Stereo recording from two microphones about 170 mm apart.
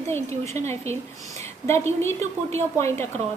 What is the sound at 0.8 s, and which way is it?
Speech, 40° right (ahead or behind).